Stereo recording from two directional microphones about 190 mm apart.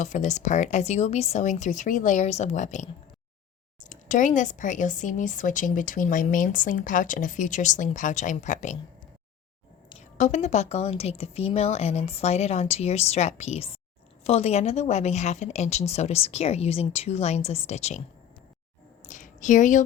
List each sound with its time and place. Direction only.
0.0 s speech: 40° left (ahead or behind)
10.2 s speech: 40° left (ahead or behind)
19.0 s a sound: 40° left (ahead or behind)